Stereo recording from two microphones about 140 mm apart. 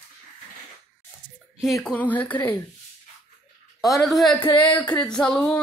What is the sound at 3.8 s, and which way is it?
Speech, centre (ahead or behind).